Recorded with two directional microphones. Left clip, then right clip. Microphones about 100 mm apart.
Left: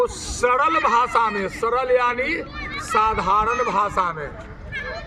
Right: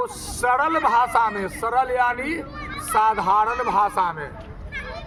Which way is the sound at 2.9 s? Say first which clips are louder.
Even; 45° right (ahead or behind).